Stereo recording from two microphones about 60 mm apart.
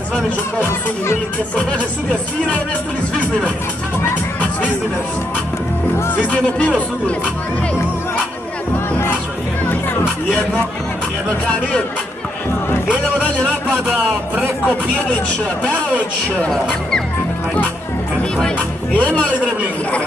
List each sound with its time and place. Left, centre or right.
16.4 s speech: centre
18.9 s a man's voice: left